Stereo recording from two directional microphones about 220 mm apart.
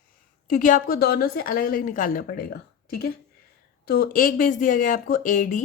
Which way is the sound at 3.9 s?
40° left (ahead or behind).